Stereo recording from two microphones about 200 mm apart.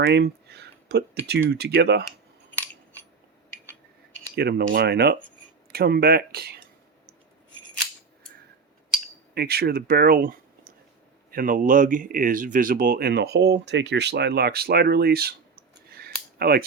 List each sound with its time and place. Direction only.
0.0 s a sound: 55° right (ahead or behind)
1.5 s speech: 55° right (ahead or behind)
4.4 s speech: 55° right (ahead or behind)
9.3 s speech: 55° right (ahead or behind)